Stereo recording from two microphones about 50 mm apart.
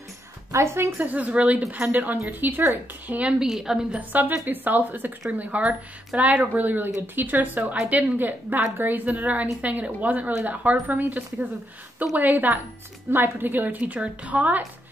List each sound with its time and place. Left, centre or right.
0.5 s a woman's voice: right
0.9 s a woman's voice: right
3.3 s a woman's voice: centre
3.9 s a woman's voice: right
5.4 s a woman's voice: right